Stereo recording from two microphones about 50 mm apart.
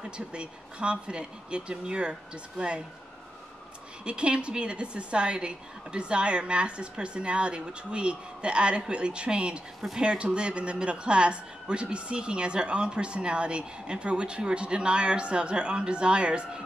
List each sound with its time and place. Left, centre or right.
0.0 s speech: right
4.0 s speech: right